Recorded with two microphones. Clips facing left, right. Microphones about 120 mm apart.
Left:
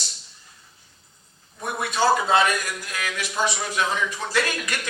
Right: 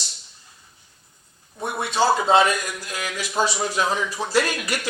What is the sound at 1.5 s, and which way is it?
A man's voice, 20° right (ahead or behind).